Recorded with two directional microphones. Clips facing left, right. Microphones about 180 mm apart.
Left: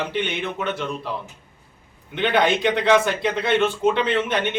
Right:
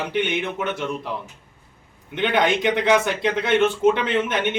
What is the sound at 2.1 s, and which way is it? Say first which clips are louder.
Speech: left 1 dB; 15° right (ahead or behind).